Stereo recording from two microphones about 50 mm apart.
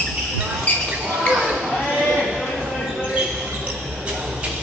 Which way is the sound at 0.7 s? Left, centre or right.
Left.